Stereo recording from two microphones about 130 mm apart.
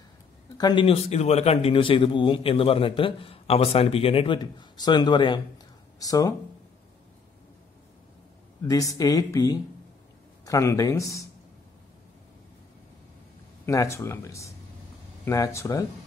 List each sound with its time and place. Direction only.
0.6 s a man's voice: 30° left (ahead or behind)
0.8 s a man's voice: 55° left (ahead or behind)
4.4 s a man's voice: 30° left (ahead or behind)
8.6 s a woman's voice: 25° left (ahead or behind)
13.7 s a woman's voice: 25° left (ahead or behind)